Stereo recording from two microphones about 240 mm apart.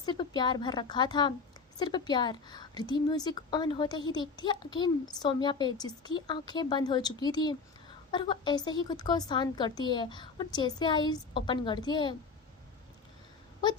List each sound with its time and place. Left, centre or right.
0.0 s a woman's voice: centre